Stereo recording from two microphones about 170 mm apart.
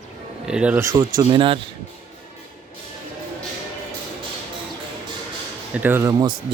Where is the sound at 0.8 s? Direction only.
20° right (ahead or behind).